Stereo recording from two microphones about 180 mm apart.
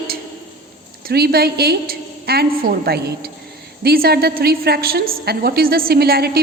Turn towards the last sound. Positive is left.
turn(degrees=-60)  # may be behind; listen again after turning